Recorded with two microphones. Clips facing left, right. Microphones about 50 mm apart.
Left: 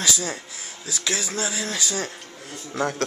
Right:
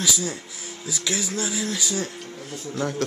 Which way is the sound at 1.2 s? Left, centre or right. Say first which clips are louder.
Even; left.